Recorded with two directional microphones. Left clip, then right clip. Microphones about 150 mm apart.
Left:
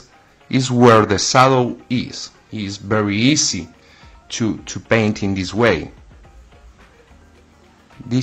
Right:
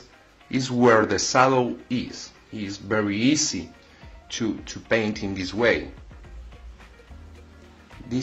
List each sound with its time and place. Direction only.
0.5 s speech: 35° left (ahead or behind)